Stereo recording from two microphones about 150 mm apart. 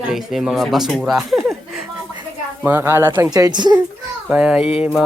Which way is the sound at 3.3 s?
25° right (ahead or behind).